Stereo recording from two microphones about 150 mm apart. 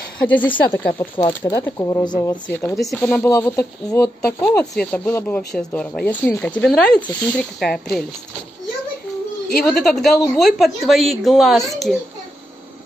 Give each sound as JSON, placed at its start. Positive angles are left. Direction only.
{"t": 0.2, "sound": "speech", "side_deg": 10}
{"t": 0.7, "sound": "a woman's voice", "side_deg": 25}
{"t": 9.6, "sound": "a woman's voice", "side_deg": 0}